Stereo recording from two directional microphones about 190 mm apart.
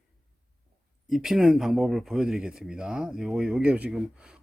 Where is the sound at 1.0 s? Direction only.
Centre (ahead or behind).